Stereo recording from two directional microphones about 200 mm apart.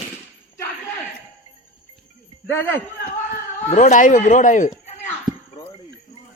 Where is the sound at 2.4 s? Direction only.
10° left (ahead or behind).